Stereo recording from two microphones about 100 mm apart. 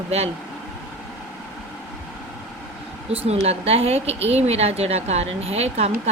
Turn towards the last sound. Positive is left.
turn(degrees=-90)